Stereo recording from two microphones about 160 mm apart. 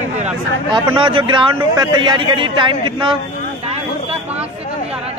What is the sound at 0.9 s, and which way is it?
Speech, 30° right (ahead or behind).